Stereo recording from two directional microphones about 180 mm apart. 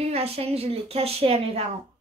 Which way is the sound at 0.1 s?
35° right (ahead or behind).